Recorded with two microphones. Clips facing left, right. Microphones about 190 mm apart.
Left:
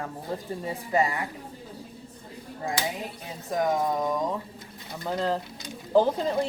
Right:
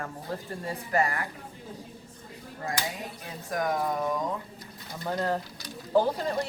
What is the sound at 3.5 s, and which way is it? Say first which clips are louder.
Speech: left 3 dB; 20° left (ahead or behind).